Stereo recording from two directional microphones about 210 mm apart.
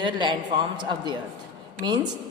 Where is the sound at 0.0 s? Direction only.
20° right (ahead or behind).